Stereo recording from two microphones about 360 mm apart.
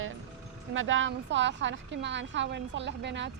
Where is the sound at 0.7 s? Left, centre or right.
Right.